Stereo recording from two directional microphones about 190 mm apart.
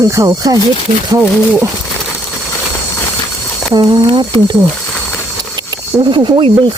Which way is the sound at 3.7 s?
20° right (ahead or behind).